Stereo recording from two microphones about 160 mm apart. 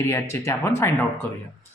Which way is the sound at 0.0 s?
15° left (ahead or behind).